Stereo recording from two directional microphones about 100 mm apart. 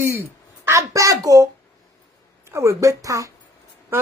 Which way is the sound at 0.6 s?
30° right (ahead or behind).